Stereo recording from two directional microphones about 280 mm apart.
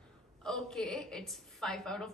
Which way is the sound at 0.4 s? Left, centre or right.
Centre.